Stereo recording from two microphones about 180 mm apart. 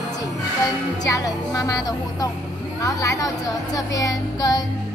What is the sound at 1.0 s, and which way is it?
Speech, 20° left (ahead or behind).